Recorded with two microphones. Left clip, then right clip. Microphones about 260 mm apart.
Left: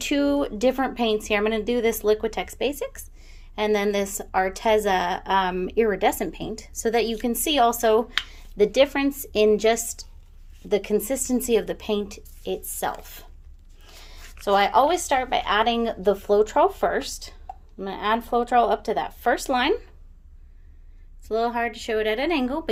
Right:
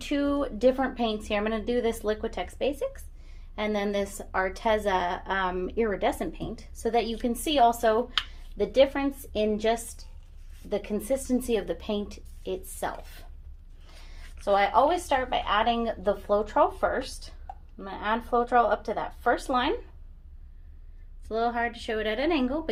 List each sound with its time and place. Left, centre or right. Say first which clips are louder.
0.0 s a woman's voice: left 5 dB; left
21.2 s a woman's voice: left 3 dB; left